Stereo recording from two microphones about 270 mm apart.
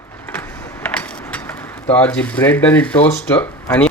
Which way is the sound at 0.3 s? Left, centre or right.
Centre.